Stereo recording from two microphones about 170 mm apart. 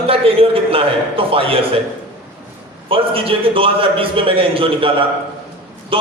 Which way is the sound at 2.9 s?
30° right (ahead or behind).